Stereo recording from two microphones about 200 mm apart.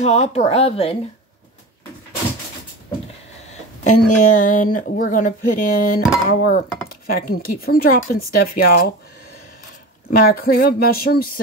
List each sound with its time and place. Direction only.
0.0 s speech: 30° left (ahead or behind)
3.8 s speech: 45° left (ahead or behind)
10.2 s speech: 50° left (ahead or behind)